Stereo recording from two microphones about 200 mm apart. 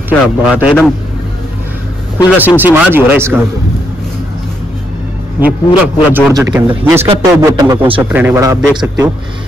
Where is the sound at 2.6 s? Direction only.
10° right (ahead or behind).